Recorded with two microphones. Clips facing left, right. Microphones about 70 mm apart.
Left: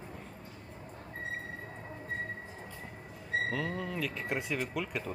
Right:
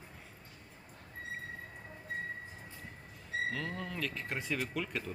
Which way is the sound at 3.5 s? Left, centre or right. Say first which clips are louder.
Left 4 dB; centre.